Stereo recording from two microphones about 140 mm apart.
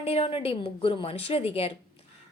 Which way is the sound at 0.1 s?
45° left (ahead or behind).